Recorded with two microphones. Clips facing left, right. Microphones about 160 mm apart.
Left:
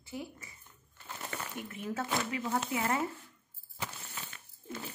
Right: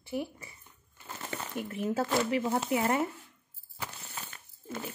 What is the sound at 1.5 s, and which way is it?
Speech, 30° right (ahead or behind).